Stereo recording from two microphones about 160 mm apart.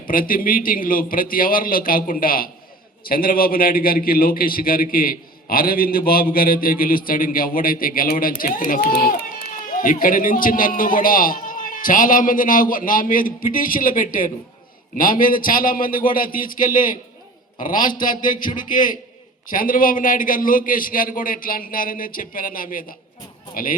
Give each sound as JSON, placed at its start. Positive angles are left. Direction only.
{"t": 0.1, "sound": "a man's voice", "side_deg": 60}